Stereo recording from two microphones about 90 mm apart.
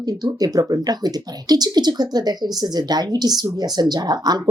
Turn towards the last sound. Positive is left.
turn(degrees=-50)  # may be behind; listen again after turning